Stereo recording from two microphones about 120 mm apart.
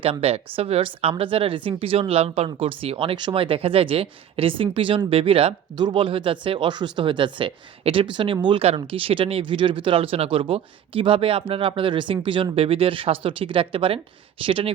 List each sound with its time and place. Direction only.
0.0 s speech: 55° right (ahead or behind)